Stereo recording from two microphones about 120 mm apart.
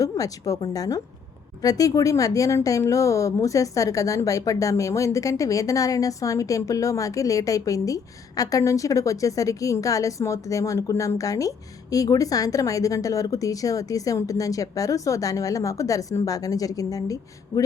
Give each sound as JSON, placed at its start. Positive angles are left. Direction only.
{"t": 0.0, "sound": "a woman's voice", "side_deg": 30}